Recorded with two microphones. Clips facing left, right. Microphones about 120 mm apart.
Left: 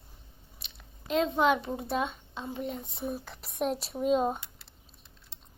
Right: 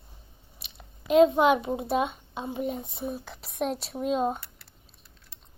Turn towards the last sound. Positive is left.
turn(degrees=0)  # may be behind; listen again after turning